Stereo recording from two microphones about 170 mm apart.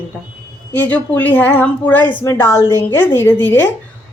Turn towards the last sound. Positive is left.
turn(degrees=10)  # may be behind; listen again after turning